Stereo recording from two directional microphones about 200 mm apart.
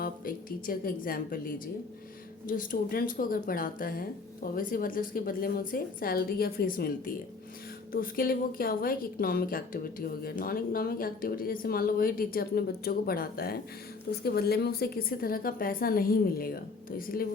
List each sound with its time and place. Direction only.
0.0 s a woman's voice: 45° left (ahead or behind)